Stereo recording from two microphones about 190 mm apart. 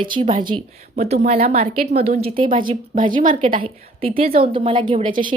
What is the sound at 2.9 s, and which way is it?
Speech, 45° right (ahead or behind).